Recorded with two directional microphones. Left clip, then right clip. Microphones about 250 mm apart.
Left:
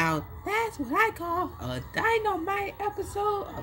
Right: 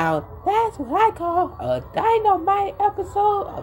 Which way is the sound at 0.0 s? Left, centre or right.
Left.